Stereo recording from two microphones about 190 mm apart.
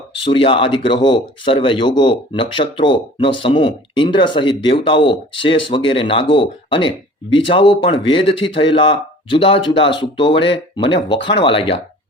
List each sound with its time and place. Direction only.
0.2 s speech: 25° left (ahead or behind)